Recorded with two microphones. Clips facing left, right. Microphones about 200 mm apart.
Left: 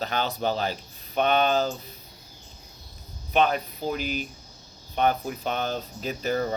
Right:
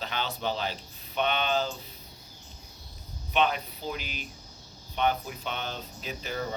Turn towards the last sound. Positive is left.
turn(degrees=45)  # may be behind; listen again after turning